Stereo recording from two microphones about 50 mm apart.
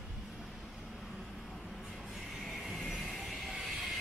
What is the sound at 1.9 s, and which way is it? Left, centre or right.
Music, centre.